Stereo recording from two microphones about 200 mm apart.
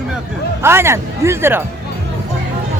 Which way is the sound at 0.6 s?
10° right (ahead or behind).